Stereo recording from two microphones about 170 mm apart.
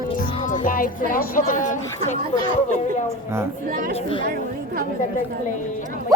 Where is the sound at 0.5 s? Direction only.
50° left (ahead or behind).